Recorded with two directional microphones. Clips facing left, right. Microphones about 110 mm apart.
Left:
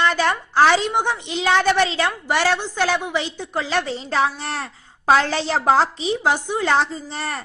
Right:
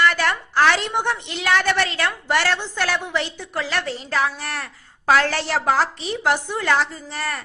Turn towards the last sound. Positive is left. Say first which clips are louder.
# left 1 dB
turn(degrees=25)  # may be behind; listen again after turning